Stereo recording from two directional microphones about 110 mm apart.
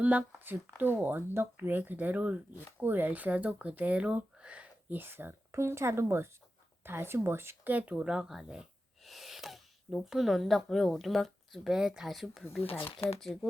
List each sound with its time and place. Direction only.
0.0 s speech: 15° right (ahead or behind); by 13.5 s centre (ahead or behind)